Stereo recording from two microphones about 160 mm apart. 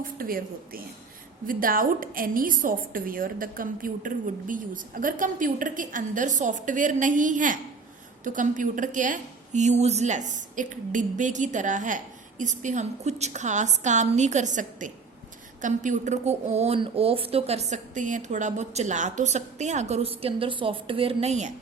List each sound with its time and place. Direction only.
0.0 s a woman's voice: 65° right (ahead or behind); by 21.5 s 45° right (ahead or behind)